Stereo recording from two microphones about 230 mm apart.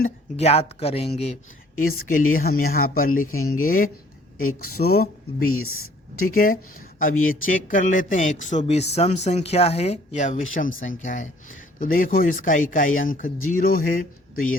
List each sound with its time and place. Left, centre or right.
0.0 s speech: left
1.8 s speech: left
3.3 s speech: left
3.6 s speech: left
5.5 s speech: left
6.1 s speech: left